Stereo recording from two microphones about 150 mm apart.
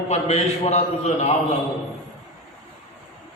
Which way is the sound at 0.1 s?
45° left (ahead or behind).